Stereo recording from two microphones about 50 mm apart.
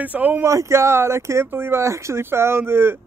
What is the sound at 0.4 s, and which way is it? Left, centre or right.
Speech, right.